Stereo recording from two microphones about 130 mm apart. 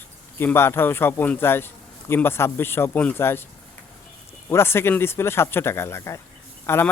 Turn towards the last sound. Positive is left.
turn(degrees=20)  # may be behind; listen again after turning